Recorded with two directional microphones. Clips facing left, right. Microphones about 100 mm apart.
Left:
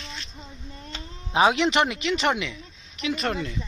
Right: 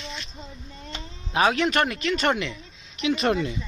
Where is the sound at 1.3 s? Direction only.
20° left (ahead or behind).